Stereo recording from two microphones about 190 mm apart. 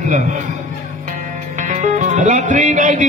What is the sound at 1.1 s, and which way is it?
Music, 40° right (ahead or behind).